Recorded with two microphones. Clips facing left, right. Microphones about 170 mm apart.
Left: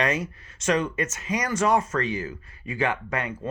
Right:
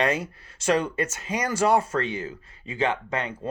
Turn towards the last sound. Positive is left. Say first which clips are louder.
# right 1 dB
turn(degrees=-25)  # may be behind; listen again after turning